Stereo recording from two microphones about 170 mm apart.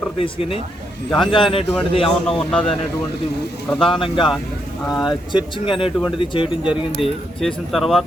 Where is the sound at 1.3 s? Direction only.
30° left (ahead or behind).